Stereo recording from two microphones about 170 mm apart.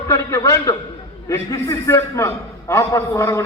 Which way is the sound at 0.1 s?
20° left (ahead or behind).